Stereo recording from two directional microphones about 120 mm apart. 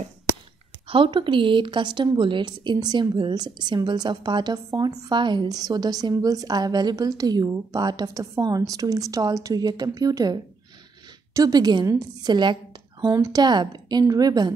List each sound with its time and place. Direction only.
0.8 s a woman's voice: 45° right (ahead or behind)